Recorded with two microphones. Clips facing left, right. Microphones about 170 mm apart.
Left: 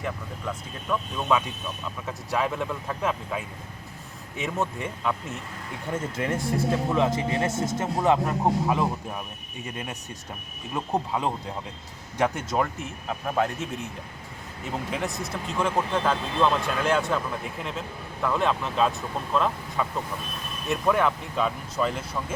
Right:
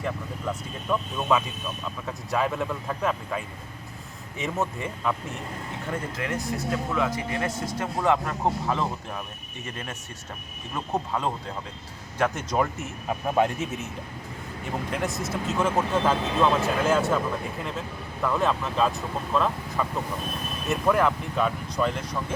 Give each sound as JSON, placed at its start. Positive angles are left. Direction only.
{"t": 0.0, "sound": "speech", "side_deg": -5}
{"t": 5.9, "sound": "speech", "side_deg": 25}
{"t": 12.5, "sound": "speech", "side_deg": 0}
{"t": 13.1, "sound": "speech", "side_deg": -15}
{"t": 14.8, "sound": "speech", "side_deg": 0}